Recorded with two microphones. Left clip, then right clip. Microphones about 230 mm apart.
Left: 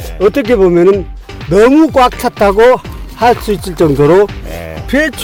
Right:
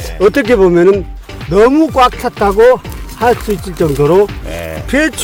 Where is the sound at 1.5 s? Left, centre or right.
Left.